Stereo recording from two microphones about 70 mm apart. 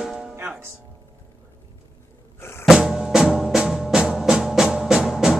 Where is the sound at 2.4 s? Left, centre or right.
Left.